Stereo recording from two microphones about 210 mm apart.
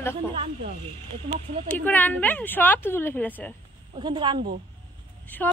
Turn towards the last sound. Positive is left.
turn(degrees=10)  # may be behind; listen again after turning